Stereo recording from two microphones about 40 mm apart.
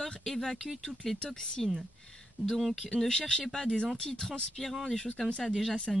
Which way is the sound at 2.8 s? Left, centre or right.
Centre.